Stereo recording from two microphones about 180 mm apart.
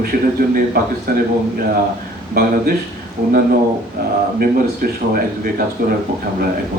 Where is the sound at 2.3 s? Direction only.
55° right (ahead or behind).